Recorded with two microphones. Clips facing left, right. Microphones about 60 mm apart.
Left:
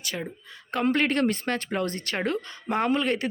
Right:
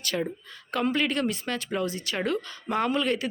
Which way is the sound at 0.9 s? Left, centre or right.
Left.